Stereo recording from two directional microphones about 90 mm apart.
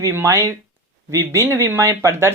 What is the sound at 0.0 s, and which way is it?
Speech, 30° right (ahead or behind).